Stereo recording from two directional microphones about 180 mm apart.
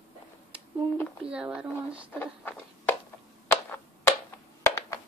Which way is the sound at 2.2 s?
10° left (ahead or behind).